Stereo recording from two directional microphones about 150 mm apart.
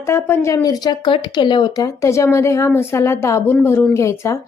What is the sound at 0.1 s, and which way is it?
Speech, 20° left (ahead or behind).